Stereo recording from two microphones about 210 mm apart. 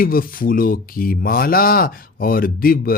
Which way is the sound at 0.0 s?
45° left (ahead or behind).